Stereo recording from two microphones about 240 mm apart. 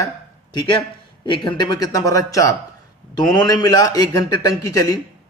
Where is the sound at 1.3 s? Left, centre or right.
Centre.